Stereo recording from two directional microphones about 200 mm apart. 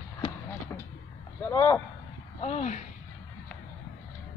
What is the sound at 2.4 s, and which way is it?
Speech, 35° left (ahead or behind).